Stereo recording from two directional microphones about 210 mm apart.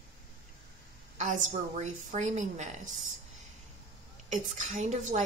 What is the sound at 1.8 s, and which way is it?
Speech, 35° right (ahead or behind).